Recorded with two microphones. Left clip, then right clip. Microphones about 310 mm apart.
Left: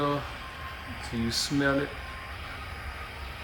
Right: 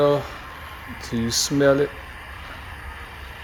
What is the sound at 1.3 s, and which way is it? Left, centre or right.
Speech, right.